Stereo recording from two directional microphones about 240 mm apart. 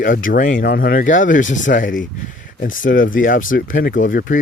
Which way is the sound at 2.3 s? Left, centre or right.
Left.